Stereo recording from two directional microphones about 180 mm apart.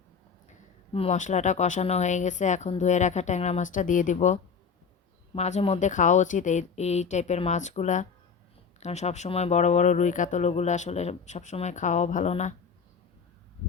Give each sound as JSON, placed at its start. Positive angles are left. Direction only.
{"t": 0.9, "sound": "speech", "side_deg": 40}